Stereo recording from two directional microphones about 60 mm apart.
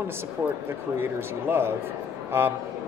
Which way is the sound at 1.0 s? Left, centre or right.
Right.